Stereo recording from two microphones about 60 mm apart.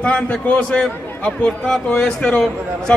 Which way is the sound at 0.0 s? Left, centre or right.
Centre.